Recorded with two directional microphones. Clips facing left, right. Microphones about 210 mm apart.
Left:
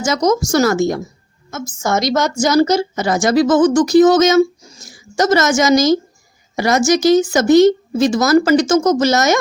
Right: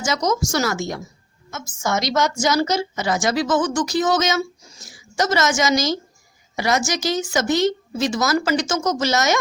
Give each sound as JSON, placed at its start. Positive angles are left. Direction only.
{"t": 0.0, "sound": "a woman's voice", "side_deg": 45}